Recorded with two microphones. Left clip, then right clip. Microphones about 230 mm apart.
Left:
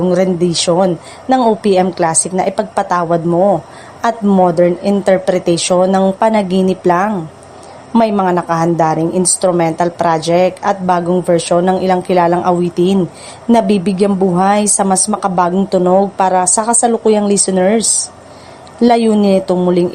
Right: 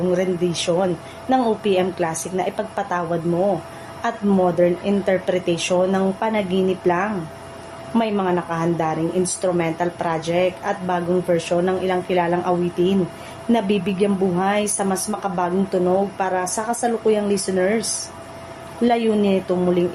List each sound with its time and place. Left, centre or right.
0.1 s a woman's voice: left